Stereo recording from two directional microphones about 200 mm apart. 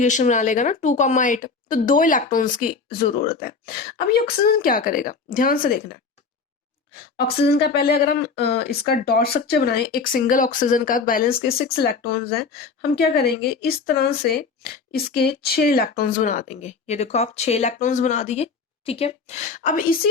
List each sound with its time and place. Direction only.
0.0 s speech: 35° left (ahead or behind)
7.2 s speech: 50° left (ahead or behind)